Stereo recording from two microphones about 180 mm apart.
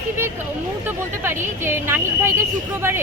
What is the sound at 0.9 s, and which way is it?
Speech, 10° right (ahead or behind).